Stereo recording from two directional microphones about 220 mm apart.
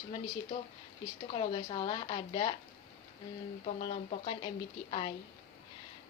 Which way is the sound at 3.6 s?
30° left (ahead or behind).